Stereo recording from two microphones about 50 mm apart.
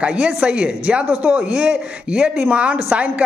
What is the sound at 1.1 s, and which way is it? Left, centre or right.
Speech, right.